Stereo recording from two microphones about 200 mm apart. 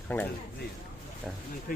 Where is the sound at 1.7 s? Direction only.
45° left (ahead or behind).